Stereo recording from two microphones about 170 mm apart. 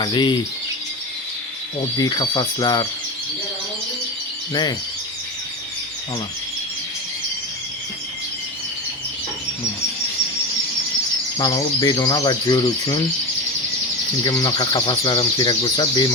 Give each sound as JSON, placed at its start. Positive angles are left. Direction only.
{"t": 0.0, "sound": "speech", "side_deg": 25}
{"t": 2.0, "sound": "speech", "side_deg": 25}
{"t": 11.3, "sound": "speech", "side_deg": 25}
{"t": 14.3, "sound": "speech", "side_deg": 20}